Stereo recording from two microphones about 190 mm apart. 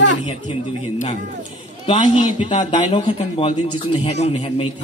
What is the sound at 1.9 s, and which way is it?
A man's voice, 25° left (ahead or behind).